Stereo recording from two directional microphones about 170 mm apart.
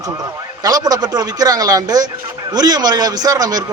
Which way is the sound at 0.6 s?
20° right (ahead or behind).